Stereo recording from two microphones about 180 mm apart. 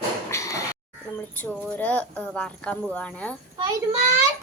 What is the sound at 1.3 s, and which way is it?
A woman's voice, 10° left (ahead or behind).